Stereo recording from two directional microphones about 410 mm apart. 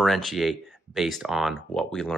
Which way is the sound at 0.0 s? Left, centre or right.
Centre.